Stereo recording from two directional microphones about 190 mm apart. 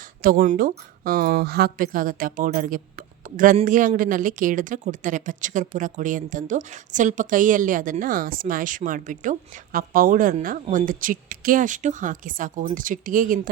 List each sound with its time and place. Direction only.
0.0 s speech: 45° right (ahead or behind)